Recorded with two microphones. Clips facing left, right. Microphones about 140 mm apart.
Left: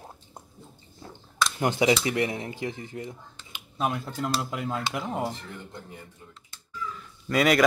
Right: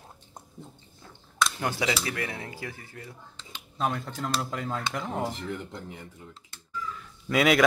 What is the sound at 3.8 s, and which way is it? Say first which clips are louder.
A man's voice: left 1 dB; 5° left (ahead or behind).